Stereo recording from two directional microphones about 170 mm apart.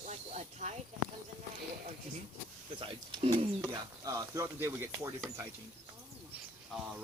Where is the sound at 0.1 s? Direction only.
45° right (ahead or behind).